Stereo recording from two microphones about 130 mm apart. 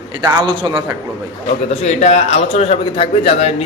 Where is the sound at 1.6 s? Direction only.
60° left (ahead or behind).